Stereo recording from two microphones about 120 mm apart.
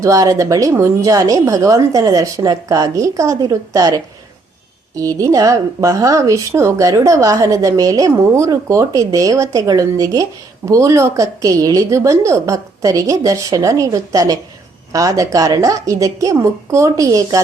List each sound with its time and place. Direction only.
0.0 s speech: 30° right (ahead or behind)